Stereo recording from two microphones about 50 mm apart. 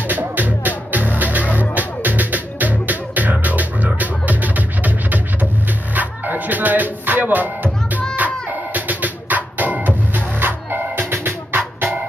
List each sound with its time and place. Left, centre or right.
0.0 s music: right